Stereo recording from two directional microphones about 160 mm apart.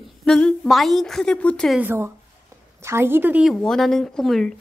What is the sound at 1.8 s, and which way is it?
A woman's voice, 15° right (ahead or behind).